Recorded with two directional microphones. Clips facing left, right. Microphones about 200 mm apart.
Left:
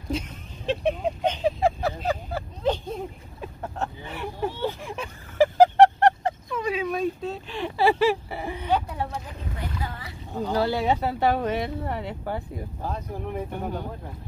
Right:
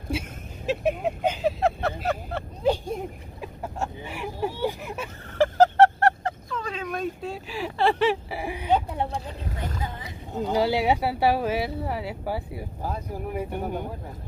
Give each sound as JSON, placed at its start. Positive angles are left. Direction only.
{"t": 0.1, "sound": "speech", "side_deg": -10}
{"t": 5.4, "sound": "a sound", "side_deg": 15}
{"t": 8.4, "sound": "speech", "side_deg": -10}
{"t": 8.6, "sound": "speech", "side_deg": -25}